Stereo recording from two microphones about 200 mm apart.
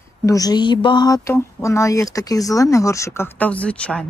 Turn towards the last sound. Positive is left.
turn(degrees=5)  # may be behind; listen again after turning